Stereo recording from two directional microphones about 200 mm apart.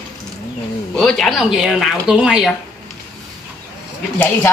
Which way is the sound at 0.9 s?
Centre (ahead or behind).